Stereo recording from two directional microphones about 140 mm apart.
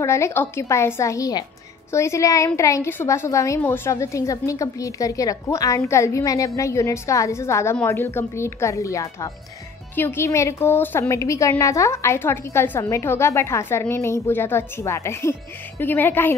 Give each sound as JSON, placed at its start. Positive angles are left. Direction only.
{"t": 0.0, "sound": "a woman's voice", "side_deg": 20}